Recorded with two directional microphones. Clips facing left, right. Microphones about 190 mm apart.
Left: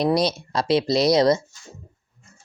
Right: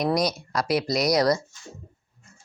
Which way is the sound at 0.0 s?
30° left (ahead or behind).